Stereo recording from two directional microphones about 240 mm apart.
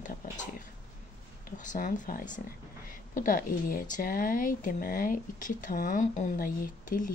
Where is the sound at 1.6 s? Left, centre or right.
Left.